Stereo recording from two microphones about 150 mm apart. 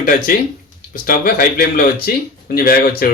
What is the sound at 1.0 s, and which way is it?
A man's voice, 70° left (ahead or behind).